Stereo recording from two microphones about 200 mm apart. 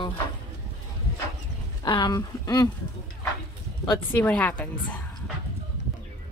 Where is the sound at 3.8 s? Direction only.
10° left (ahead or behind).